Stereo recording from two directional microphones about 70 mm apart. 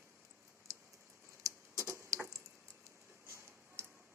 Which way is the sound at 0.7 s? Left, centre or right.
Right.